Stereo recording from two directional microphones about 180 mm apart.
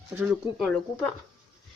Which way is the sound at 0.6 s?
5° left (ahead or behind).